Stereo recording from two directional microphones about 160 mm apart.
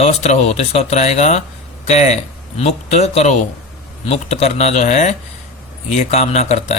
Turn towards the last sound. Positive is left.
turn(degrees=45)  # may be behind; listen again after turning